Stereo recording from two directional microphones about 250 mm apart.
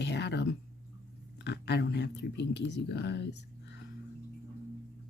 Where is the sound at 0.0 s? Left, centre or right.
Left.